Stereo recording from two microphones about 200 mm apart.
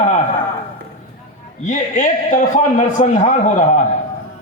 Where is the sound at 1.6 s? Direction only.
40° left (ahead or behind).